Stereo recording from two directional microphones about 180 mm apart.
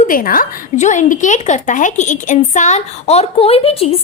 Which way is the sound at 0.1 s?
50° left (ahead or behind).